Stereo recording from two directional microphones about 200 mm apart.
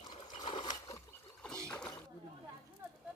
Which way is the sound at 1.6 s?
5° left (ahead or behind).